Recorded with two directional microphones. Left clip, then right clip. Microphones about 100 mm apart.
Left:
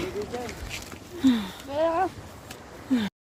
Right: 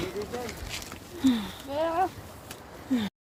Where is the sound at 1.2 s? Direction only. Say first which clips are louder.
Left 3 dB; 35° left (ahead or behind).